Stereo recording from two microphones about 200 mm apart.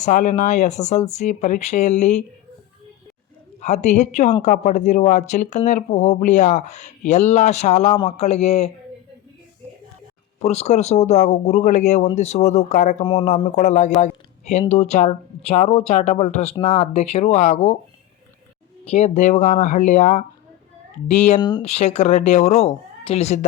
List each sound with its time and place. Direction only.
0.0 s a woman's voice: 35° left (ahead or behind)
3.6 s a woman's voice: 35° left (ahead or behind)
10.4 s a woman's voice: 30° left (ahead or behind)
18.9 s a woman's voice: 35° left (ahead or behind)